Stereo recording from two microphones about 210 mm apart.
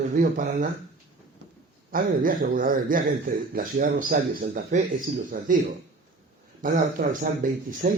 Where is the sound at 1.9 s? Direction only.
40° right (ahead or behind).